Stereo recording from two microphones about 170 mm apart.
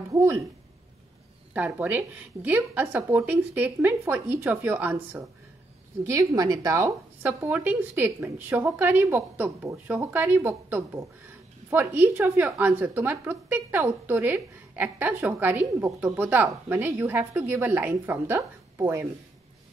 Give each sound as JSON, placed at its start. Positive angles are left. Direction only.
{"t": 0.1, "sound": "a woman's voice", "side_deg": -15}
{"t": 1.5, "sound": "a woman's voice", "side_deg": -10}
{"t": 6.0, "sound": "a woman's voice", "side_deg": -20}